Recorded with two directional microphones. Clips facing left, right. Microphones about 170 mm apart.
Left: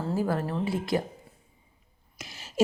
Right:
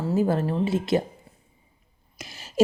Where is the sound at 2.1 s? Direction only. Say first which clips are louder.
Right 4 dB; 40° right (ahead or behind).